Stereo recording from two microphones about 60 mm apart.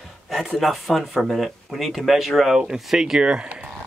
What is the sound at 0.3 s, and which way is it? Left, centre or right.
Speech, centre.